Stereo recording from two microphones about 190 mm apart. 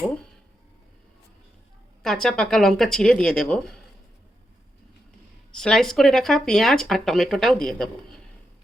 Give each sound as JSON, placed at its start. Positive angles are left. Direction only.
{"t": 2.0, "sound": "speech", "side_deg": 5}
{"t": 5.5, "sound": "speech", "side_deg": 5}